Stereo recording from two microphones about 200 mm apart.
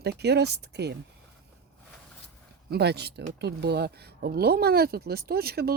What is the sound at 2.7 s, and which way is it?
Speech, 55° right (ahead or behind).